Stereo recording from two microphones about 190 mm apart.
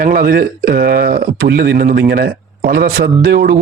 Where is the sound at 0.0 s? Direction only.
50° right (ahead or behind).